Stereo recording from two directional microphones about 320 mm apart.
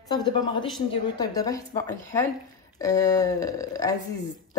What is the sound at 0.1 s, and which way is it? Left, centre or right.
Speech, centre.